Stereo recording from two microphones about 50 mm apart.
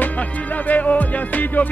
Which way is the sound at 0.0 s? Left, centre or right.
Left.